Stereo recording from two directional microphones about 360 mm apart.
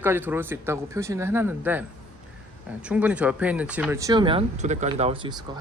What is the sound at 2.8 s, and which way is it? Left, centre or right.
Speech, centre.